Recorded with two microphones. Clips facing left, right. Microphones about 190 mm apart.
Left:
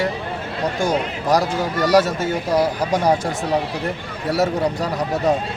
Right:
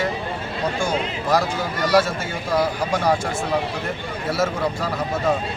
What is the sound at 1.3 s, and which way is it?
Speech, 40° left (ahead or behind).